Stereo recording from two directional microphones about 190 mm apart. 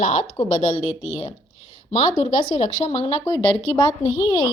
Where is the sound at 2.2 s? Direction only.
35° left (ahead or behind).